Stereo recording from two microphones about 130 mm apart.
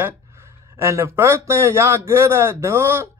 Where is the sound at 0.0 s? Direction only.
20° right (ahead or behind).